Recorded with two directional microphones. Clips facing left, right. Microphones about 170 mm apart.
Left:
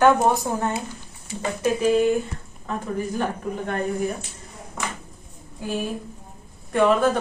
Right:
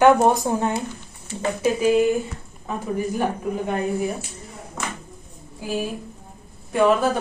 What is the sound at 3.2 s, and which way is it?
Speech, 10° right (ahead or behind).